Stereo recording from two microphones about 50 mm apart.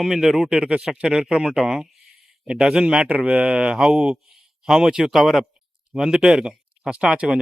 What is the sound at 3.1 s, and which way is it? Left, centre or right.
Speech, right.